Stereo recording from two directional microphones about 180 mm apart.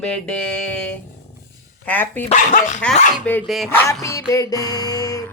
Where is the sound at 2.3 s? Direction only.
45° left (ahead or behind).